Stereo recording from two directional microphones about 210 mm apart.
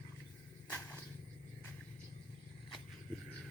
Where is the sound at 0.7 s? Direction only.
10° left (ahead or behind).